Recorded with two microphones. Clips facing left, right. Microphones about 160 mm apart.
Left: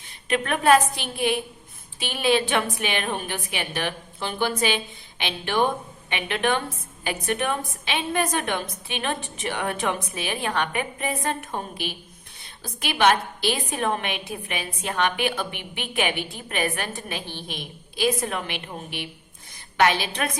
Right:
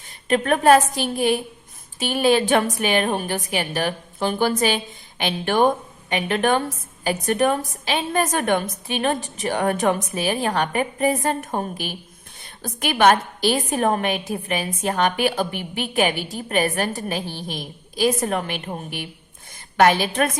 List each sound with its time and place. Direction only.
0.0 s a woman's voice: 45° right (ahead or behind)